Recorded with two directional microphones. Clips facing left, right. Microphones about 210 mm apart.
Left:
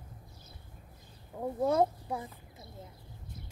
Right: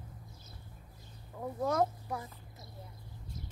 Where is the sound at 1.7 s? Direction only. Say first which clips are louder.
Left 3 dB; 30° left (ahead or behind).